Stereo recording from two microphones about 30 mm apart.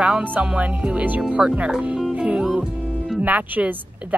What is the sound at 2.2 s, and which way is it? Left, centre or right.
Music, right.